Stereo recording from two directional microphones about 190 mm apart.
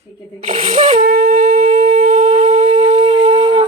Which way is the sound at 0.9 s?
45° right (ahead or behind).